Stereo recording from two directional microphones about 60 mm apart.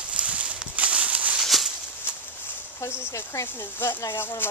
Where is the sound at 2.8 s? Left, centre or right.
Left.